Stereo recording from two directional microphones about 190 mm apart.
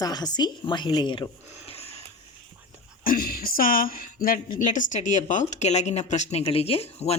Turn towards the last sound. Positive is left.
turn(degrees=30)  # may be behind; listen again after turning